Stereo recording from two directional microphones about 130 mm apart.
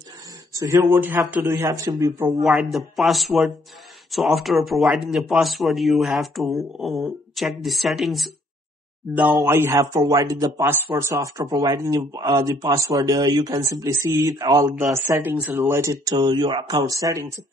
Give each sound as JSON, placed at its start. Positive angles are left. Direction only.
{"t": 0.6, "sound": "a man's voice", "side_deg": -25}
{"t": 2.4, "sound": "speech", "side_deg": 0}
{"t": 9.5, "sound": "speech", "side_deg": -20}